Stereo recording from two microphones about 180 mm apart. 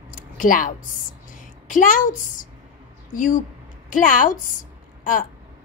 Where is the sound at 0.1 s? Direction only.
50° left (ahead or behind).